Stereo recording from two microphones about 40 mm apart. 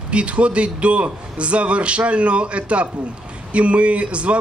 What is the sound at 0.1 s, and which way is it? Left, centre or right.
A man's voice, right.